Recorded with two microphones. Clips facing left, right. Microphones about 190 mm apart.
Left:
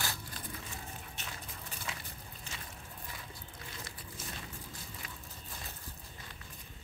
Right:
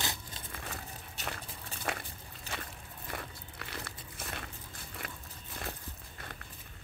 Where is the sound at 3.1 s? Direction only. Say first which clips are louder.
Right 5 dB; 65° right (ahead or behind).